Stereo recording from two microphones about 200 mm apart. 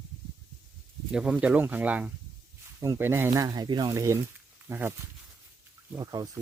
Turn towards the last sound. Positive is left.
turn(degrees=-15)  # may be behind; listen again after turning